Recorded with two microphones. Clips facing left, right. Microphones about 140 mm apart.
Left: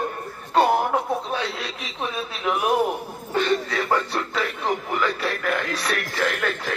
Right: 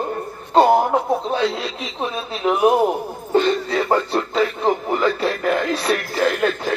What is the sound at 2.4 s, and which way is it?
Speech, 25° right (ahead or behind).